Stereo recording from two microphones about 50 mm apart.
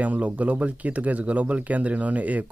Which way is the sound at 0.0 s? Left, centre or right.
Right.